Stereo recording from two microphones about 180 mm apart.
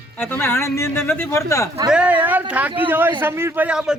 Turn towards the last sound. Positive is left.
turn(degrees=-5)  # may be behind; listen again after turning